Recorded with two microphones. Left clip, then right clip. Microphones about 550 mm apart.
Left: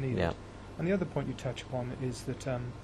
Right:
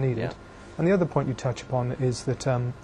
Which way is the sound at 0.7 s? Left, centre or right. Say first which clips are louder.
Right 9 dB; right.